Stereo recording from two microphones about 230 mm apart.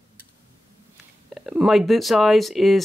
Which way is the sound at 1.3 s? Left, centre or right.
Centre.